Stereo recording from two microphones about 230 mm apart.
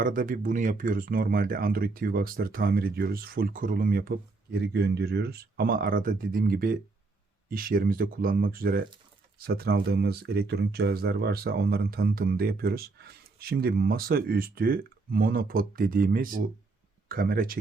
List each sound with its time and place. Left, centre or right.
0.0 s speech: right